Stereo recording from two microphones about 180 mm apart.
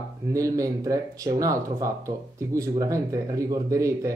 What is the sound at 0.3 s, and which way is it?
Speech, 20° right (ahead or behind).